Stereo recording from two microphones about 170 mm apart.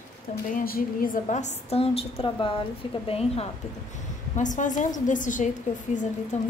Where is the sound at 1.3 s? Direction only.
45° left (ahead or behind).